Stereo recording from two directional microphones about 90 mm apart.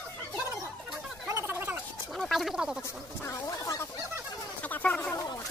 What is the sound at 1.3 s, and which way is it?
Gargling, 30° right (ahead or behind).